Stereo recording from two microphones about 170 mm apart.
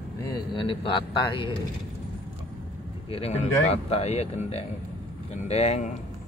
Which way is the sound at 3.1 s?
35° left (ahead or behind).